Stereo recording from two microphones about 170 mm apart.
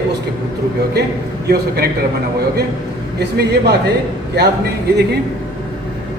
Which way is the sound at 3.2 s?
75° right (ahead or behind).